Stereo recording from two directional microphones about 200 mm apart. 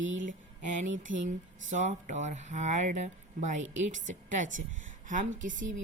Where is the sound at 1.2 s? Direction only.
40° right (ahead or behind).